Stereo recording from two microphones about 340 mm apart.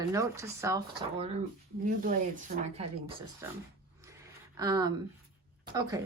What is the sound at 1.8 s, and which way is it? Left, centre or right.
Speech, right.